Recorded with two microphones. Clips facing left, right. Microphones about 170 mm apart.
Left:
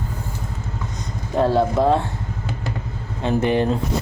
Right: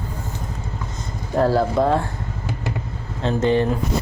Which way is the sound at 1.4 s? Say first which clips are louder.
Even; centre (ahead or behind).